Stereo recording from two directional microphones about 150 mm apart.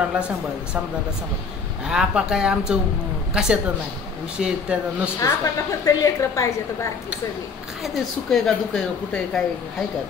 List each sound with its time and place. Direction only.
1.9 s speech: 5° right (ahead or behind)
5.2 s a woman's voice: 20° left (ahead or behind)
7.8 s speech: 5° left (ahead or behind)